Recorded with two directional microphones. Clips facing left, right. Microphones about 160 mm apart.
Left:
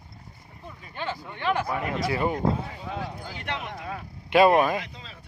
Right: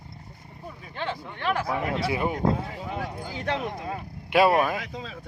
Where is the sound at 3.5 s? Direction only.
40° right (ahead or behind).